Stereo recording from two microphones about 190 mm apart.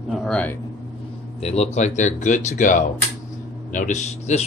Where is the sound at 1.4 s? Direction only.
35° left (ahead or behind).